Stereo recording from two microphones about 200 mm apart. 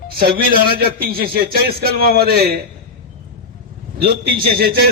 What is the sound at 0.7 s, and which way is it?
A man's voice, 50° right (ahead or behind).